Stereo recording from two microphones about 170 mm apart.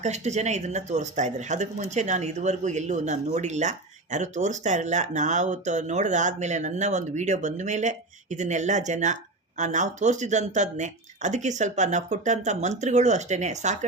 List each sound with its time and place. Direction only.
0.0 s speech: 40° right (ahead or behind)